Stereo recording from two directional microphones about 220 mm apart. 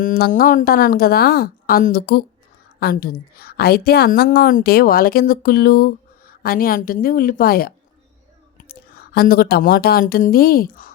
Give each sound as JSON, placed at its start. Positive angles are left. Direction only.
{"t": 0.0, "sound": "a woman's voice", "side_deg": 40}